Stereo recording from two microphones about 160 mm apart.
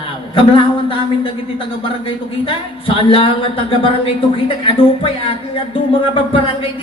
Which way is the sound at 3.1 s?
35° left (ahead or behind).